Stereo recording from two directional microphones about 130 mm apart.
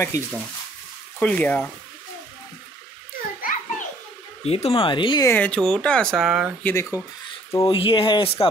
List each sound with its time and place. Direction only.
0.1 s speech: 25° left (ahead or behind)
1.2 s speech: 10° left (ahead or behind)
3.2 s a sound: 90° left
4.5 s speech: 50° left (ahead or behind)
5.2 s speech: 15° left (ahead or behind); by 6.5 s centre (ahead or behind)
6.6 s speech: 20° left (ahead or behind)
7.7 s speech: 45° left (ahead or behind)